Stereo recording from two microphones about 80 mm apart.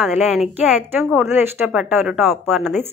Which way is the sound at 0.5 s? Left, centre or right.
Right.